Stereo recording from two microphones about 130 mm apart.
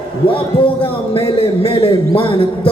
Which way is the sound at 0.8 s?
45° left (ahead or behind).